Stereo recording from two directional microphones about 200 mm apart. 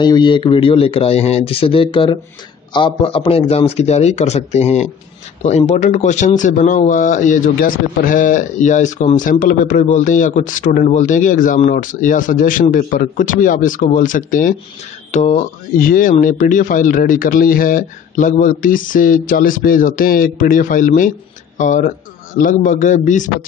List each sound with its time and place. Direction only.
0.0 s speech: 20° left (ahead or behind); by 23.3 s 40° left (ahead or behind)